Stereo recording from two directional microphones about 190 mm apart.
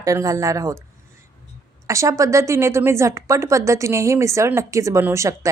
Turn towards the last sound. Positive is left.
turn(degrees=-15)  # may be behind; listen again after turning